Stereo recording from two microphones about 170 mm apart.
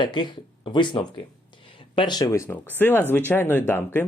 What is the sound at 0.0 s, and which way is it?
Speech, 30° left (ahead or behind).